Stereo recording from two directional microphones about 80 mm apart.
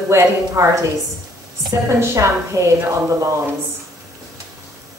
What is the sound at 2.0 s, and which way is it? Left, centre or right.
Speech, right.